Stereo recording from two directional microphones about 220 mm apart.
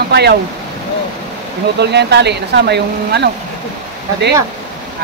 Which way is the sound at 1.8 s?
50° right (ahead or behind).